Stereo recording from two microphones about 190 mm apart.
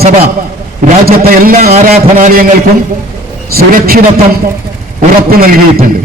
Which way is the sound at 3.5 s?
50° right (ahead or behind).